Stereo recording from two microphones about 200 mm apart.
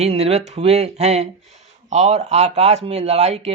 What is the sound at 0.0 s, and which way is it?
Speech, 30° right (ahead or behind).